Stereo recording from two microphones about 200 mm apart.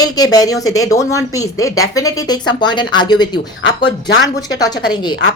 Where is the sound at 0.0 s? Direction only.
20° left (ahead or behind).